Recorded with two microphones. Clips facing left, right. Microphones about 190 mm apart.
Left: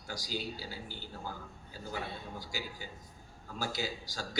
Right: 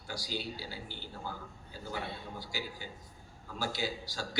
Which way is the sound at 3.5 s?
45° left (ahead or behind).